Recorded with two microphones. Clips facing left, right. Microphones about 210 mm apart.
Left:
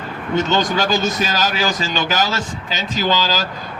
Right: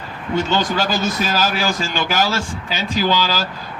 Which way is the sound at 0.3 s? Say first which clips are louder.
Left 1 dB; 10° right (ahead or behind).